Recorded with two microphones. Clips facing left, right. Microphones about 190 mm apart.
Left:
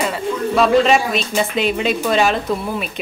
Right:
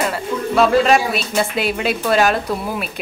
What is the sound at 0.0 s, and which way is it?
A woman's voice, centre (ahead or behind).